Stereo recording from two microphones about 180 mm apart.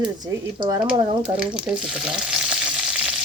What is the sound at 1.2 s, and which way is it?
Speech, 5° right (ahead or behind).